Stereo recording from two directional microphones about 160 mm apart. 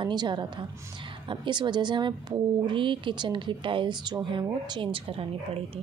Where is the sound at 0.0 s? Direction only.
25° right (ahead or behind).